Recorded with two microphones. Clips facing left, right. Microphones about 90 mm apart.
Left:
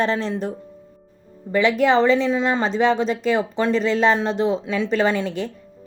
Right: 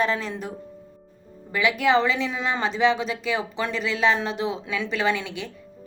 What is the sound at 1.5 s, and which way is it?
A woman's voice, 35° left (ahead or behind).